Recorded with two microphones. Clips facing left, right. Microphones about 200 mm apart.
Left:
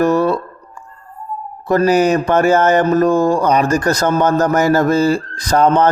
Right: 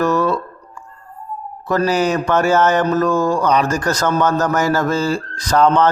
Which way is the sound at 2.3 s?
55° left (ahead or behind).